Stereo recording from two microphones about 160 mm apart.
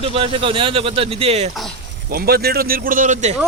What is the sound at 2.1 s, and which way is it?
A man's voice, 75° right (ahead or behind).